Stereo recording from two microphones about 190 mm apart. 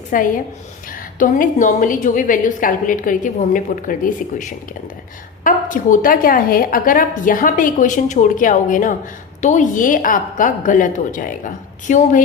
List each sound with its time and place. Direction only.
0.1 s a woman's voice: 45° left (ahead or behind)